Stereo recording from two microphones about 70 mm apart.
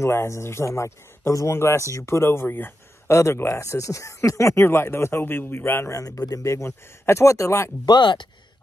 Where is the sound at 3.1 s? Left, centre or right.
Left.